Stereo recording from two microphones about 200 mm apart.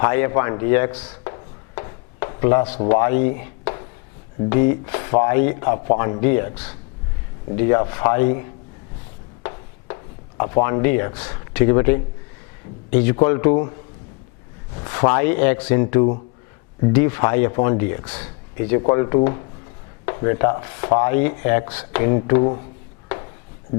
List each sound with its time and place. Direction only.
0.0 s speech: 15° left (ahead or behind)
1.0 s a sound: 20° left (ahead or behind)
2.9 s speech: 15° left (ahead or behind)
9.4 s a sound: 20° left (ahead or behind)
12.9 s speech: 15° left (ahead or behind)
14.8 s speech: 20° left (ahead or behind)